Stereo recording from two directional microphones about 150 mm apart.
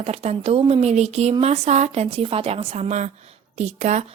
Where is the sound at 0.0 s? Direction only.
45° right (ahead or behind).